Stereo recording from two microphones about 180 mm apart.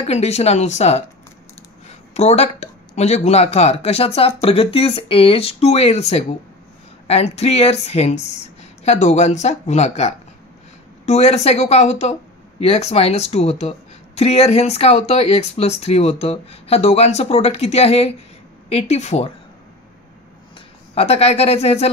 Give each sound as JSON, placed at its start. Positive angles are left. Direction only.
{"t": 0.0, "sound": "a woman's voice", "side_deg": 35}
{"t": 2.1, "sound": "a woman's voice", "side_deg": 35}
{"t": 20.9, "sound": "a woman's voice", "side_deg": 35}